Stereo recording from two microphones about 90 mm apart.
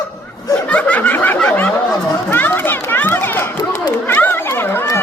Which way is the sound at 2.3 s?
25° left (ahead or behind).